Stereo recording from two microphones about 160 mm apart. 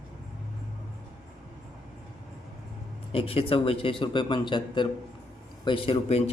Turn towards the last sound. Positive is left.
turn(degrees=35)  # may be behind; listen again after turning